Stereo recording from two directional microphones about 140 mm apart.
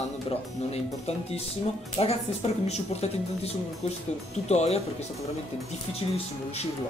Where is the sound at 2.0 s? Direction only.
45° left (ahead or behind).